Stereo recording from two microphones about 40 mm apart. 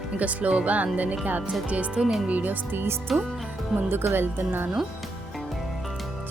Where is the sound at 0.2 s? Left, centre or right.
Right.